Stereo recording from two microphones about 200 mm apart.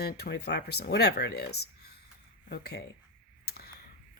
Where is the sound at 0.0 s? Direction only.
50° left (ahead or behind).